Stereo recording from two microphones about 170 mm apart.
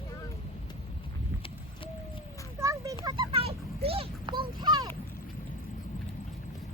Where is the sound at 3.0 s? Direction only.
30° right (ahead or behind).